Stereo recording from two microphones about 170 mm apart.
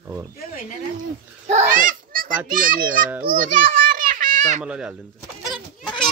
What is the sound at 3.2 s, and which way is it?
Children playing, 50° right (ahead or behind).